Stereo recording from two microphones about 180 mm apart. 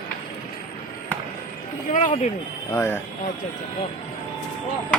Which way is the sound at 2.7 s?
15° left (ahead or behind).